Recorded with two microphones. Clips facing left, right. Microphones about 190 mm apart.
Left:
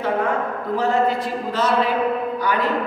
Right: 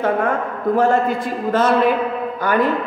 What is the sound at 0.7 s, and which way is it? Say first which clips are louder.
Speech: right 2 dB; 50° right (ahead or behind).